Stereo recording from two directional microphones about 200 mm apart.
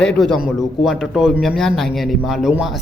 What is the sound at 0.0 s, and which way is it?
A man's voice, 5° left (ahead or behind).